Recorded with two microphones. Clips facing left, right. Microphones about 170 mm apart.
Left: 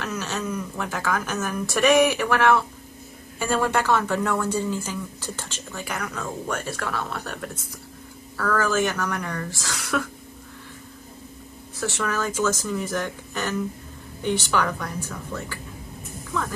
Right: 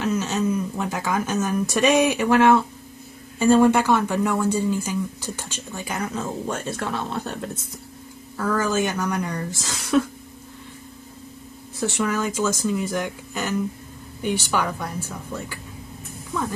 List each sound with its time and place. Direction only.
0.0 s a woman's voice: 20° right (ahead or behind)
12.0 s speech: 15° right (ahead or behind)